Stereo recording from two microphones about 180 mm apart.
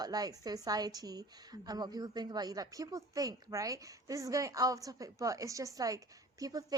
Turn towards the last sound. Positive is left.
turn(degrees=-20)  # may be behind; listen again after turning